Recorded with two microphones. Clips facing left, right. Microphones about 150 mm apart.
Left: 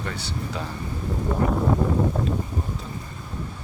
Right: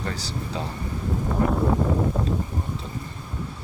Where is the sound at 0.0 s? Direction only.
35° right (ahead or behind).